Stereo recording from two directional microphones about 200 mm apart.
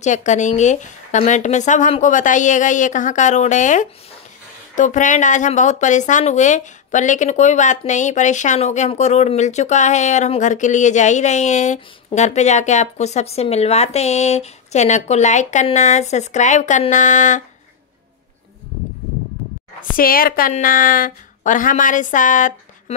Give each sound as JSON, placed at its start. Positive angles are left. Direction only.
{"t": 0.0, "sound": "speech", "side_deg": 35}
{"t": 20.0, "sound": "speech", "side_deg": 45}